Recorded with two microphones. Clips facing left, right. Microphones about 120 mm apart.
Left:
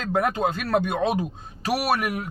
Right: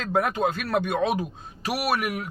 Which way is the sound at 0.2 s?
25° left (ahead or behind).